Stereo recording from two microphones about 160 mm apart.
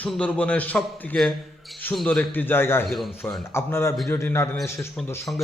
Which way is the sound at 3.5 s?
15° left (ahead or behind).